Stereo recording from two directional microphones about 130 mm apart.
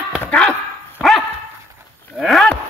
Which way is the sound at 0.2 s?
5° left (ahead or behind).